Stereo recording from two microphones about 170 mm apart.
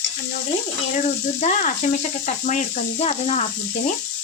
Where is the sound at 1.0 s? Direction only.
45° left (ahead or behind).